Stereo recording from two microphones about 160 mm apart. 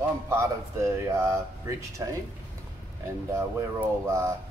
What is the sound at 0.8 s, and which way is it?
A man's voice, 20° right (ahead or behind).